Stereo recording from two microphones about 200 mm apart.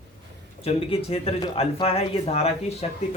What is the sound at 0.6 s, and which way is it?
Speech, 30° left (ahead or behind).